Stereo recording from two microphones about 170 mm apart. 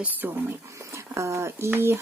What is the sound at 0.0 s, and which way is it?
Speech, 10° right (ahead or behind).